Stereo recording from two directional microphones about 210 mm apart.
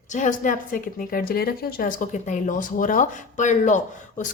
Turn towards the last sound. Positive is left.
turn(degrees=35)  # may be behind; listen again after turning